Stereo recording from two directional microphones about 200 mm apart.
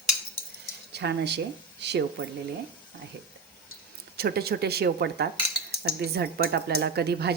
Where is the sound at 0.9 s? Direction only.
55° right (ahead or behind).